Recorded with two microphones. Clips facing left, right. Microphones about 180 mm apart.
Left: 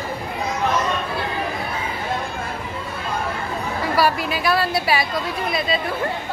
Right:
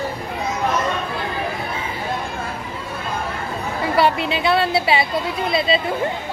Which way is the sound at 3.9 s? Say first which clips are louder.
Right 2 dB; 25° right (ahead or behind).